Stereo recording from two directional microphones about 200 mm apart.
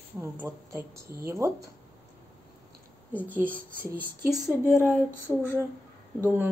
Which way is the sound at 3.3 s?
5° left (ahead or behind).